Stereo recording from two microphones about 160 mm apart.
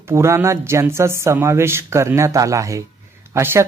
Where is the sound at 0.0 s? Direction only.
15° right (ahead or behind).